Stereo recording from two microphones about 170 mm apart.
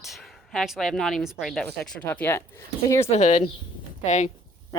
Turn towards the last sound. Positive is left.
turn(degrees=45)  # may be behind; listen again after turning